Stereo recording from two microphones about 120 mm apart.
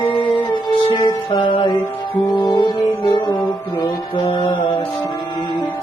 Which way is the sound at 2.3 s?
40° left (ahead or behind).